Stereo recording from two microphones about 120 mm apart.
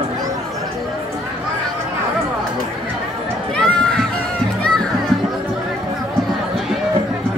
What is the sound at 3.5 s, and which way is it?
Run, 5° left (ahead or behind).